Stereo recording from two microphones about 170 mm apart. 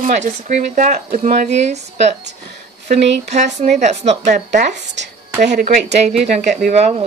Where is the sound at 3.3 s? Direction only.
45° right (ahead or behind).